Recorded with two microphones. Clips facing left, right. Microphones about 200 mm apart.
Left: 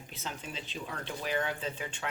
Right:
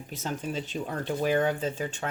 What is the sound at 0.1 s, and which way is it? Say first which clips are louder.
Speech: right 9 dB; 45° right (ahead or behind).